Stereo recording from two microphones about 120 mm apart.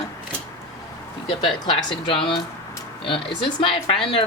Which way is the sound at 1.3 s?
40° left (ahead or behind).